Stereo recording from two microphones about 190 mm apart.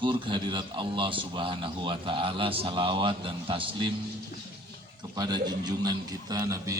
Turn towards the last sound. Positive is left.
turn(degrees=-15)  # may be behind; listen again after turning